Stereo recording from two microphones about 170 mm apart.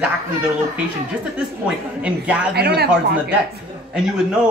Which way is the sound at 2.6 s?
70° right (ahead or behind).